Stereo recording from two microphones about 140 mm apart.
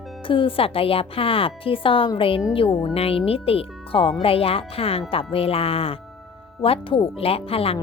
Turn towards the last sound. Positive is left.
turn(degrees=45)  # may be behind; listen again after turning